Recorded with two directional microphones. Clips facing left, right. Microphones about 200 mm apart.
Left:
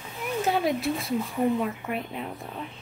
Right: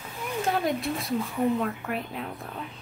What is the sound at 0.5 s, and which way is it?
A woman's voice, centre (ahead or behind).